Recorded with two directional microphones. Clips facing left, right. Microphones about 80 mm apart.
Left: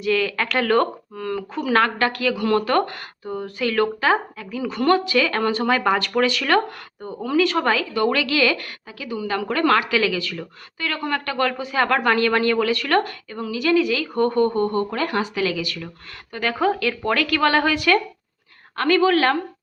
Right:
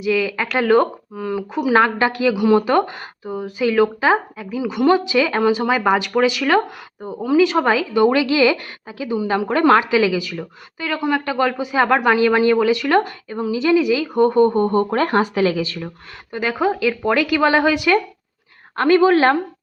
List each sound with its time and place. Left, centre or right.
0.0 s speech: centre; by 10.0 s right
10.0 s speech: centre; by 15.9 s right
16.3 s a woman's voice: centre